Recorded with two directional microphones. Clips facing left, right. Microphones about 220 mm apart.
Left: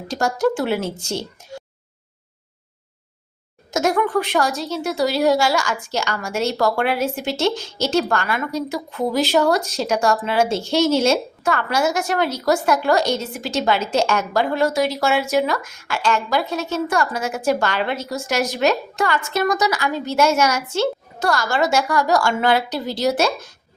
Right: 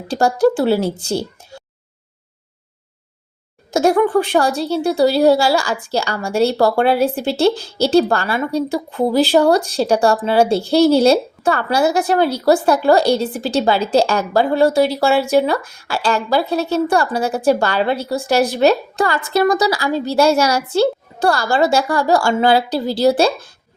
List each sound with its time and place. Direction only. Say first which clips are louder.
0.1 s a woman's voice: right 5 dB; 30° right (ahead or behind)
3.7 s a woman's voice: right 5 dB; 30° right (ahead or behind)